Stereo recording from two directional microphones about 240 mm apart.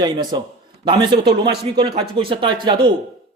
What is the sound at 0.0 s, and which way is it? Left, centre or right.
A man's voice, centre.